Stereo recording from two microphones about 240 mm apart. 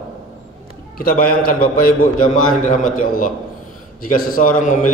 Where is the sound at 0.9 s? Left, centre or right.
Left.